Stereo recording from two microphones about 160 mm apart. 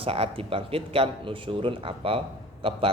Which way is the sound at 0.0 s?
35° right (ahead or behind).